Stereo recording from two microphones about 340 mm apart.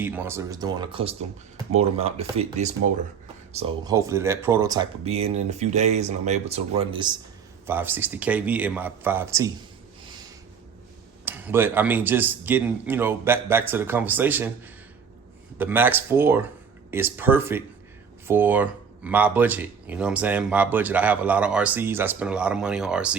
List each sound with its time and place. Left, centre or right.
0.0 s speech: centre
11.3 s speech: centre
15.5 s speech: centre